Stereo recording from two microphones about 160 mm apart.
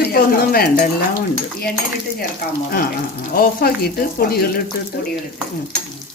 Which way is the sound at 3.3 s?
65° left (ahead or behind).